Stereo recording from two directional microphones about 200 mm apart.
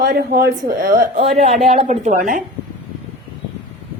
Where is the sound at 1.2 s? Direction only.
30° right (ahead or behind).